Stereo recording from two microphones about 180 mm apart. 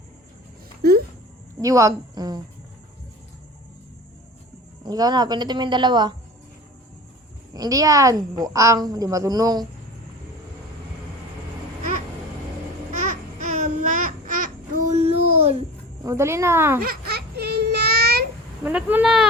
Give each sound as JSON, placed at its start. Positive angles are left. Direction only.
{"t": 0.8, "sound": "a sound", "side_deg": -60}
{"t": 1.6, "sound": "a woman's voice", "side_deg": -20}
{"t": 4.9, "sound": "a woman's voice", "side_deg": -20}
{"t": 7.5, "sound": "a woman's voice", "side_deg": -20}
{"t": 12.9, "sound": "babbling", "side_deg": -40}
{"t": 14.8, "sound": "a sound", "side_deg": -35}
{"t": 16.0, "sound": "speech", "side_deg": -15}
{"t": 16.8, "sound": "a sound", "side_deg": -60}
{"t": 18.6, "sound": "speech", "side_deg": -10}